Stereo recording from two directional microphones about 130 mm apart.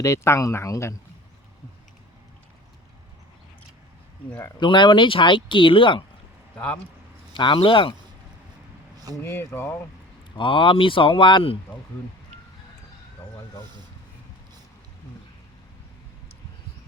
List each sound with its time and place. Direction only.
0.0 s speech: 25° left (ahead or behind)
4.6 s speech: 40° left (ahead or behind)
7.3 s speech: 40° left (ahead or behind)
9.2 s speech: 20° left (ahead or behind)
10.3 s speech: 40° left (ahead or behind)